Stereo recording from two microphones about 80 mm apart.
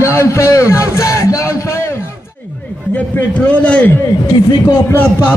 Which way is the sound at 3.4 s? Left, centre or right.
Centre.